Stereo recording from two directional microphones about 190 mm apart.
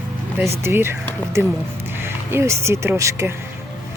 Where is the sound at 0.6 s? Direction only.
10° right (ahead or behind).